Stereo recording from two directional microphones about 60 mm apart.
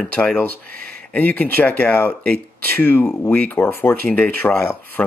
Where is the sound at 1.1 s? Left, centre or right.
Left.